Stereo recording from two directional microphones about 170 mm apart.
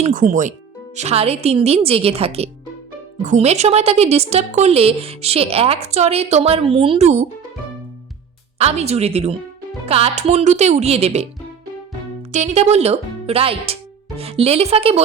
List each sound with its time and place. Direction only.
0.0 s a woman's voice: 50° right (ahead or behind)
8.5 s a woman's voice: 40° right (ahead or behind)
12.3 s a woman's voice: 40° right (ahead or behind)